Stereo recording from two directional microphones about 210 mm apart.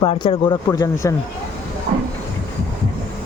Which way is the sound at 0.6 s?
15° left (ahead or behind).